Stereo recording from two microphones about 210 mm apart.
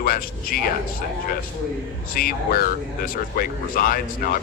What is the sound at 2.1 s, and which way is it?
Speech, 45° left (ahead or behind).